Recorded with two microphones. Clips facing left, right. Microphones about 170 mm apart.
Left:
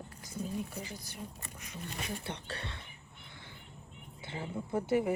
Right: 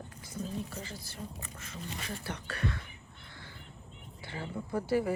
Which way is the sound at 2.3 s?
30° left (ahead or behind).